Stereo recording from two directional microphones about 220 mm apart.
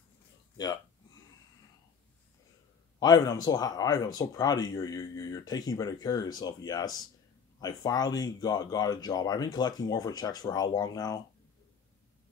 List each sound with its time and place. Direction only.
3.0 s speech: 15° left (ahead or behind)